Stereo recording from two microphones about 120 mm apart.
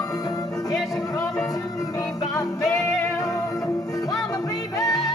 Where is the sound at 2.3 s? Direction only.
30° left (ahead or behind).